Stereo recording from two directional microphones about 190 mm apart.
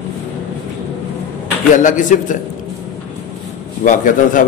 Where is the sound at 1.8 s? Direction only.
40° left (ahead or behind).